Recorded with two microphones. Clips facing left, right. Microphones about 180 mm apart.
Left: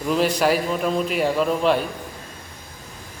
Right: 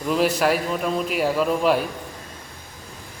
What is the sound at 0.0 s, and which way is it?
A man's voice, centre (ahead or behind).